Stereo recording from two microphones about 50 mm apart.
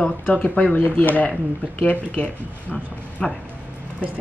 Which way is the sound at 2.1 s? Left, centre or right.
Left.